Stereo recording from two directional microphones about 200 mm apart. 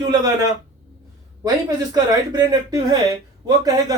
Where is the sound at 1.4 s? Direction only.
20° right (ahead or behind).